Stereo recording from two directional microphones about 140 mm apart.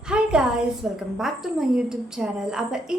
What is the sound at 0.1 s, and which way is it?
A woman's voice, 5° right (ahead or behind).